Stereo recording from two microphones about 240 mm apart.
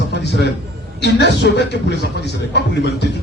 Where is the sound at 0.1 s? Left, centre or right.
Left.